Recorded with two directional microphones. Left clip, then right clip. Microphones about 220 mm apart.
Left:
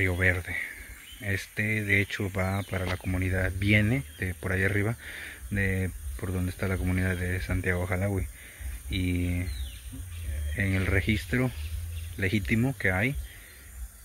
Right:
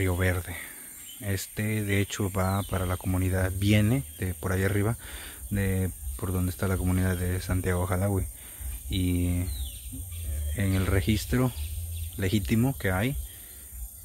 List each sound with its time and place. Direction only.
0.0 s speech: 10° right (ahead or behind)
10.5 s speech: 10° right (ahead or behind)